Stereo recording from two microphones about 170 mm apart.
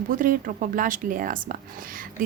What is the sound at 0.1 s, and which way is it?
Speech, 50° right (ahead or behind).